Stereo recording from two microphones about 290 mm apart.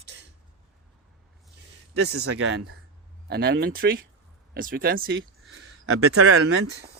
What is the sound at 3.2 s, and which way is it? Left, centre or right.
Speech, right.